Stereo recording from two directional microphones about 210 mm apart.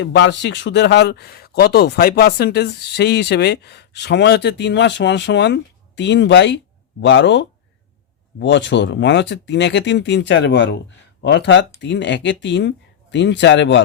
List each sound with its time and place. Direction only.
0.0 s speech: 55° left (ahead or behind)